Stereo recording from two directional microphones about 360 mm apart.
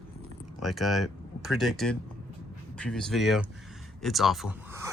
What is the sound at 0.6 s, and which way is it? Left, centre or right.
Speech, centre.